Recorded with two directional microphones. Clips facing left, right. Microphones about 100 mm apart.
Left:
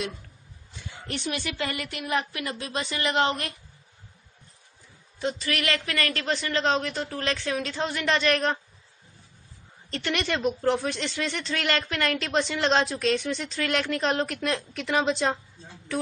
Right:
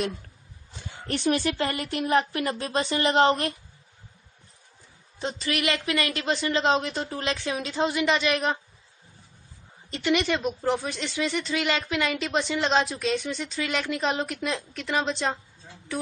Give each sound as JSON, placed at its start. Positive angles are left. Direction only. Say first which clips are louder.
{"t": 1.0, "sound": "speech", "louder": "right 7 dB", "side_deg": -40}
{"t": 5.2, "sound": "a woman's voice", "louder": "even", "side_deg": -25}
{"t": 9.8, "sound": "speech", "louder": "right 4 dB", "side_deg": -10}